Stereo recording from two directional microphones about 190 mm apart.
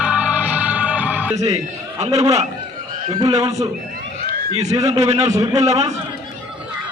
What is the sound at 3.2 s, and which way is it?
Speech, 20° right (ahead or behind).